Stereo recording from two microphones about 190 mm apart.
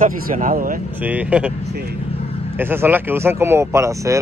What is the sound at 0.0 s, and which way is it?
Speech, 45° right (ahead or behind).